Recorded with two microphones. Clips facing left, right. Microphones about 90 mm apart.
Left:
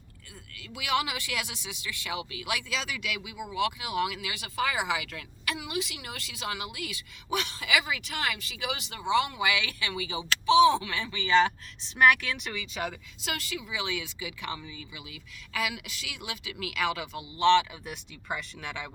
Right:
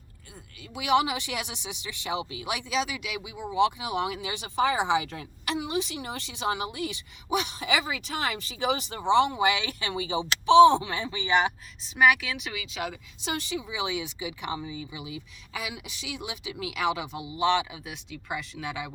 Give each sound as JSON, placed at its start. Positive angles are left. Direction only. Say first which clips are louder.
{"t": 0.7, "sound": "speech", "louder": "right 5 dB", "side_deg": -25}
{"t": 7.7, "sound": "speech", "louder": "even", "side_deg": -35}
{"t": 11.8, "sound": "speech", "louder": "even", "side_deg": -5}
{"t": 13.2, "sound": "speech", "louder": "right 4 dB", "side_deg": -25}
{"t": 17.8, "sound": "speech", "louder": "even", "side_deg": 0}